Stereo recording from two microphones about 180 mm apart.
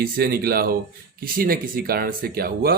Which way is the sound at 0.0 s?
60° right (ahead or behind).